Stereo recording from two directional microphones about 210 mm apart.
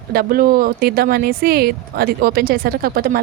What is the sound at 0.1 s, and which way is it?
Speech, 45° right (ahead or behind).